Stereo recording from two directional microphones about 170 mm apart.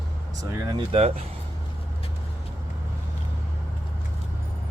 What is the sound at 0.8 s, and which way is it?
Speech, 35° right (ahead or behind).